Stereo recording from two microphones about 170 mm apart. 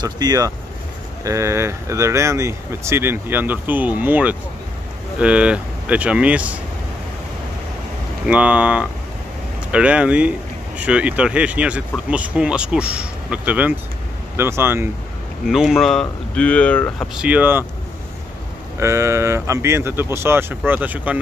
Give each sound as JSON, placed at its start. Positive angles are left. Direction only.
{"t": 0.0, "sound": "speech", "side_deg": -20}
{"t": 8.3, "sound": "speech", "side_deg": -5}
{"t": 15.4, "sound": "speech", "side_deg": -5}
{"t": 17.1, "sound": "speech", "side_deg": -5}
{"t": 18.8, "sound": "speech", "side_deg": -15}